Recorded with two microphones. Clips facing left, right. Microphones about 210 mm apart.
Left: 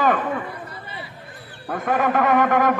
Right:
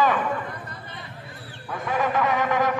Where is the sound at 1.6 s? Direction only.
55° left (ahead or behind).